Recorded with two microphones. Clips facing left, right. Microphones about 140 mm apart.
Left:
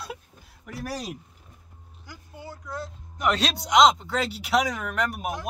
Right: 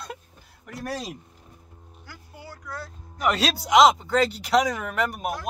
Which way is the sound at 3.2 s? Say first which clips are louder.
Right 1 dB; centre (ahead or behind).